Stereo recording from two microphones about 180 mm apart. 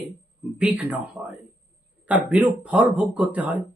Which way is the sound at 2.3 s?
5° right (ahead or behind).